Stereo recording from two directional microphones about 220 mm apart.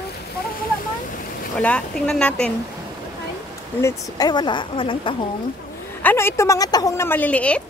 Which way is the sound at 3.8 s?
20° left (ahead or behind).